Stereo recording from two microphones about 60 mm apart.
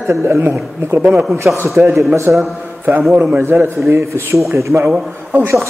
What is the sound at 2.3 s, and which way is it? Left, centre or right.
Speech, right.